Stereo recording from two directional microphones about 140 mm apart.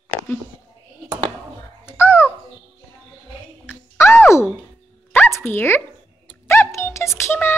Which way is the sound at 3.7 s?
15° left (ahead or behind).